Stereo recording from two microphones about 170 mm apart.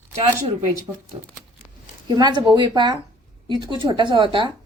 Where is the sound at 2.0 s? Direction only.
25° right (ahead or behind).